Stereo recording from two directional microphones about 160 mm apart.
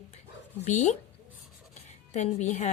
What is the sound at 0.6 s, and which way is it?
A woman's voice, 45° left (ahead or behind).